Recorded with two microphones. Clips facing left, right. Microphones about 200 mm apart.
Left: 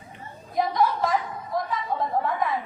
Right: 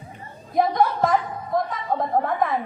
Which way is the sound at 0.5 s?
50° right (ahead or behind).